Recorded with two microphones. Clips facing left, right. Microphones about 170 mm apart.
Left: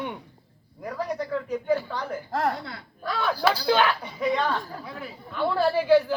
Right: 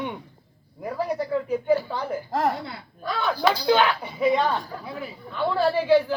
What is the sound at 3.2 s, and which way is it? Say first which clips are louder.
Speech: right 2 dB; 10° left (ahead or behind).